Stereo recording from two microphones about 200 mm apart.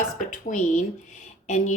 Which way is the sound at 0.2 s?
40° left (ahead or behind).